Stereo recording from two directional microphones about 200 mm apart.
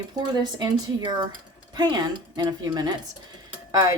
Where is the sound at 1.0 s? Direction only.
20° right (ahead or behind).